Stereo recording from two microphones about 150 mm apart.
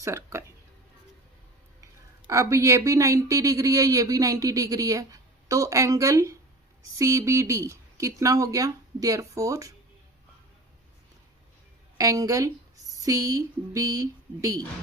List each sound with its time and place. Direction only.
0.0 s speech: 20° right (ahead or behind)
1.8 s speech: 20° right (ahead or behind)
11.9 s speech: 20° right (ahead or behind)